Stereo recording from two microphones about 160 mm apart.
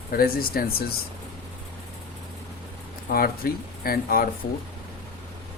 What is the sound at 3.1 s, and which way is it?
Speech, 70° left (ahead or behind).